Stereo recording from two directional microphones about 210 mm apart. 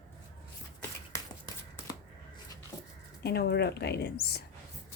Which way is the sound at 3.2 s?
50° left (ahead or behind).